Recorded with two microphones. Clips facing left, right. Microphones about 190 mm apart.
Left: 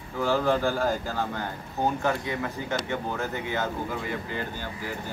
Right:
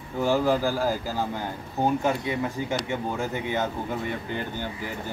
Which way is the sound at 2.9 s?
10° right (ahead or behind).